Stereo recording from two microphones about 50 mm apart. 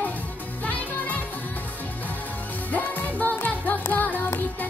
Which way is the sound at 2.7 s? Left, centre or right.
Left.